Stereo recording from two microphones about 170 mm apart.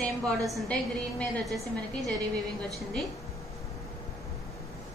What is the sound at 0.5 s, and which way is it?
A woman's voice, 5° left (ahead or behind).